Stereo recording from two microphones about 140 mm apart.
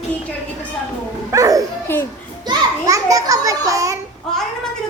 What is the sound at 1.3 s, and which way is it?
Dog, 25° right (ahead or behind).